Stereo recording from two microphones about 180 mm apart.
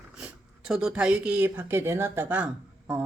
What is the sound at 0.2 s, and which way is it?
A woman's voice, 5° right (ahead or behind).